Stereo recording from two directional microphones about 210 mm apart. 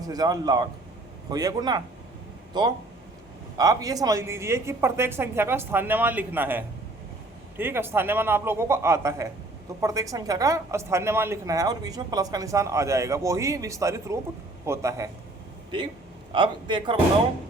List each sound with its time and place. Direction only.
0.0 s a man's voice: 20° right (ahead or behind)
16.3 s a man's voice: 20° right (ahead or behind)